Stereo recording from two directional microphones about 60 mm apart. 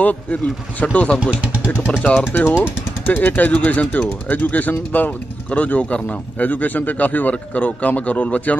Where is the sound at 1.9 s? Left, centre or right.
Centre.